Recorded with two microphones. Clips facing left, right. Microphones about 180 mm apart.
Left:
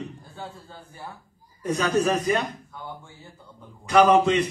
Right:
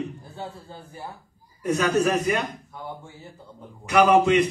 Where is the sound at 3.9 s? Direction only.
10° right (ahead or behind).